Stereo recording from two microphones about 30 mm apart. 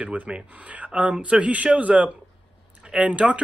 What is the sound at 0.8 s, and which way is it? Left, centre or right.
Speech, right.